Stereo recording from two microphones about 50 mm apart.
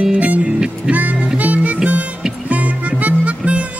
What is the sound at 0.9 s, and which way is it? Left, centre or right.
Music, right.